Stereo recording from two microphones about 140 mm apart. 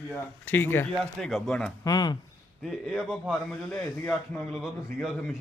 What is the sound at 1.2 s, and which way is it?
Speech, centre (ahead or behind).